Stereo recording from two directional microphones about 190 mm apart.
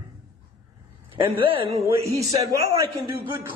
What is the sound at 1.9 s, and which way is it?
Speech, 20° right (ahead or behind).